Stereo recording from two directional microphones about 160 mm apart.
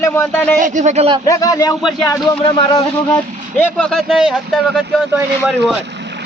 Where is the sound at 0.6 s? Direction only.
50° right (ahead or behind).